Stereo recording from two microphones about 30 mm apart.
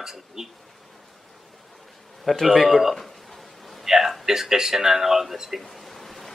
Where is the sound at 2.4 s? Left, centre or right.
Centre.